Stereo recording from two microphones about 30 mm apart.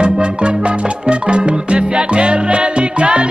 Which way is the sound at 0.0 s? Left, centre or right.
Right.